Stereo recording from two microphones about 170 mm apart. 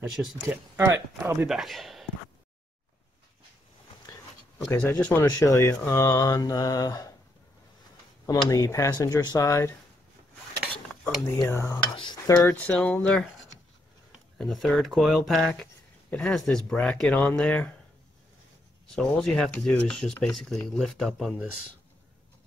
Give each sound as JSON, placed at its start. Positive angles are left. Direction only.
{"t": 0.1, "sound": "speech", "side_deg": 0}
{"t": 0.7, "sound": "speech", "side_deg": -15}
{"t": 1.5, "sound": "a man's voice", "side_deg": 0}
{"t": 4.7, "sound": "speech", "side_deg": 10}
{"t": 8.5, "sound": "speech", "side_deg": 20}
{"t": 11.2, "sound": "speech", "side_deg": 15}
{"t": 11.9, "sound": "speech", "side_deg": 25}
{"t": 12.4, "sound": "speech", "side_deg": 10}
{"t": 14.4, "sound": "speech", "side_deg": 0}
{"t": 18.9, "sound": "speech", "side_deg": 5}